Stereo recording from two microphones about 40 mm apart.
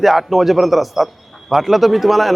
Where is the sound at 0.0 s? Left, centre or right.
Centre.